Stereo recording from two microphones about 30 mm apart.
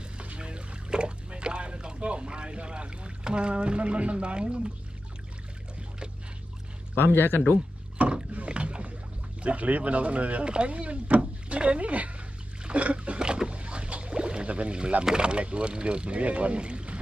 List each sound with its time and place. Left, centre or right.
0.3 s boat: right
7.9 s rowboat: right
8.4 s rowboat: right
9.4 s speech: right
10.4 s speech: right
10.7 s speech: right
12.6 s a sound: right
13.1 s boat: right
14.4 s speech: right